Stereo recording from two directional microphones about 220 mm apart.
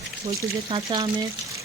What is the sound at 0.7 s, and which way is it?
Speech, 20° right (ahead or behind).